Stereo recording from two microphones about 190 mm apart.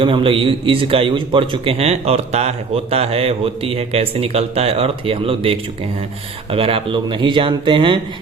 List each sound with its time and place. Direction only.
0.0 s a man's voice: 30° right (ahead or behind)